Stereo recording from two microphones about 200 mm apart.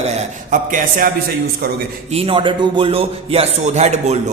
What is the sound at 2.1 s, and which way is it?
A man's voice, 25° right (ahead or behind).